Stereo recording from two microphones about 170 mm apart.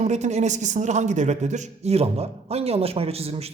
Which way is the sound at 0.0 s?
40° right (ahead or behind).